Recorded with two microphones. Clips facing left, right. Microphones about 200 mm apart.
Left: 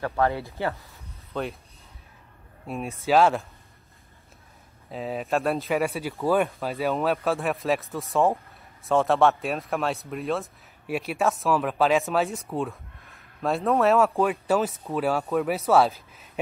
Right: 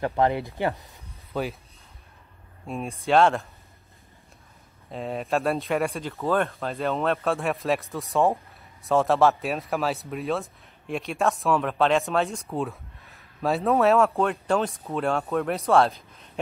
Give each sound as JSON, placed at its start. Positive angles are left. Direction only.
{"t": 0.0, "sound": "speech", "side_deg": -20}
{"t": 1.3, "sound": "speech", "side_deg": 0}
{"t": 2.6, "sound": "speech", "side_deg": 0}
{"t": 4.9, "sound": "speech", "side_deg": 0}